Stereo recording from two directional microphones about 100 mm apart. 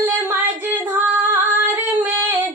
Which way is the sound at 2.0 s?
20° right (ahead or behind).